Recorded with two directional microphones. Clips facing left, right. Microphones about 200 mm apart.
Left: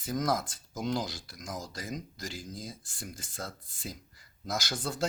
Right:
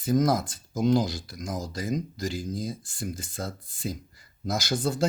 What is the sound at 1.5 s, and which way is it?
Speech, 25° right (ahead or behind).